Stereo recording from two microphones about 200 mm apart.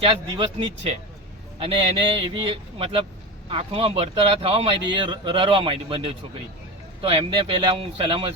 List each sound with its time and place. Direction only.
0.0 s speech: 25° right (ahead or behind)